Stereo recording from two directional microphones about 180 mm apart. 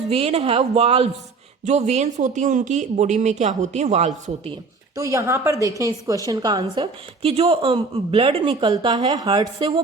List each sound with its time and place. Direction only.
0.1 s speech: 35° right (ahead or behind)
4.9 s a woman's voice: 15° right (ahead or behind)